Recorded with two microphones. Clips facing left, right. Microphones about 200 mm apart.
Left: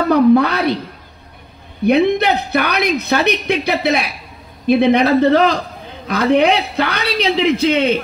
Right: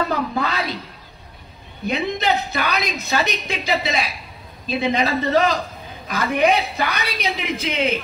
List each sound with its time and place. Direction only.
0.1 s speech: 65° left (ahead or behind)
1.9 s a woman's voice: 65° left (ahead or behind)